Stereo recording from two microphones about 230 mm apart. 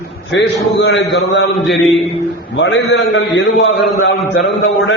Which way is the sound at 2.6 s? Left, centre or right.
Left.